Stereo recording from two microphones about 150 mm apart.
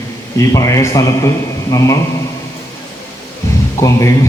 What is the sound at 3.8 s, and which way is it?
Speech, 20° left (ahead or behind).